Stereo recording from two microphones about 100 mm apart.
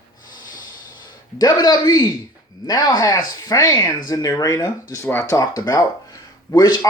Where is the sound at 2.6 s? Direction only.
40° left (ahead or behind).